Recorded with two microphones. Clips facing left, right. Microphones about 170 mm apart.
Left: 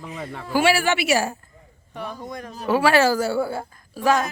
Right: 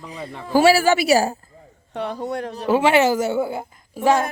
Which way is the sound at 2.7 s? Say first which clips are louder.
Right 1 dB; 20° right (ahead or behind).